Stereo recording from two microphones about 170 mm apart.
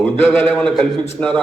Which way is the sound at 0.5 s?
Centre (ahead or behind).